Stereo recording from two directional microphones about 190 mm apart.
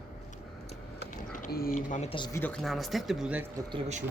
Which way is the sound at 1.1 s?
45° left (ahead or behind).